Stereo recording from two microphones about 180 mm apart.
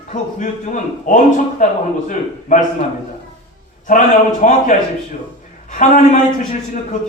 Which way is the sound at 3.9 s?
45° left (ahead or behind).